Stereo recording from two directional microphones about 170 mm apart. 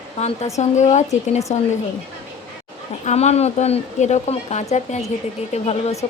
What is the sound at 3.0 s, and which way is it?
A woman's voice, 40° left (ahead or behind).